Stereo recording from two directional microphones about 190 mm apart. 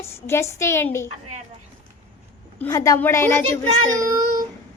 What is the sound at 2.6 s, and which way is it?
A woman's voice, 15° left (ahead or behind).